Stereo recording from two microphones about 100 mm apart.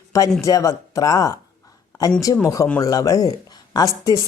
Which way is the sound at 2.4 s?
30° left (ahead or behind).